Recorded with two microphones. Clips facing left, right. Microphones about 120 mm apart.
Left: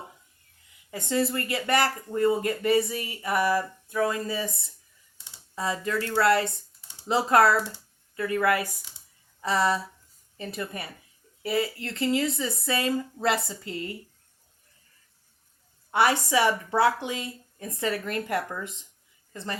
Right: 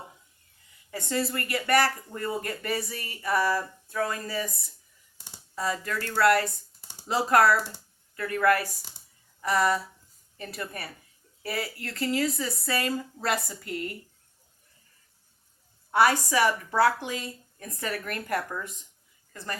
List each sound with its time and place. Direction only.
0.9 s a woman's voice: 20° left (ahead or behind)
5.5 s a woman's voice: 20° left (ahead or behind)
16.0 s a woman's voice: 25° left (ahead or behind)